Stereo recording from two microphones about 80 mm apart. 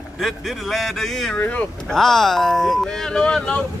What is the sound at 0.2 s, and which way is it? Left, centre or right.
Speech, centre.